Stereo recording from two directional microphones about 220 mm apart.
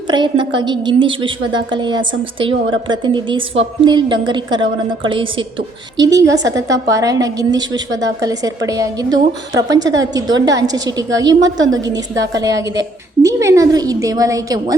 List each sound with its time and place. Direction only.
0.1 s a woman's voice: 20° right (ahead or behind)